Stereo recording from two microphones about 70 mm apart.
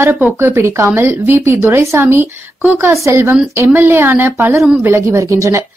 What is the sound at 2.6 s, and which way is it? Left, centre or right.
Speech, right.